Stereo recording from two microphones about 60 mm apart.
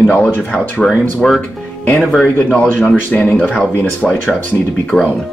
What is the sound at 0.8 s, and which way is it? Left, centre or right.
Speech, centre.